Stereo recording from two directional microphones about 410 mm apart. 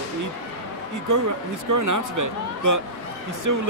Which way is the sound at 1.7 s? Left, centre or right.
Right.